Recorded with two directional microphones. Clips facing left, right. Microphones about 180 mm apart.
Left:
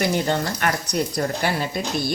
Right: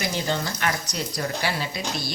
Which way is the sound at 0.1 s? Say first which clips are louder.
Left 5 dB; 60° left (ahead or behind).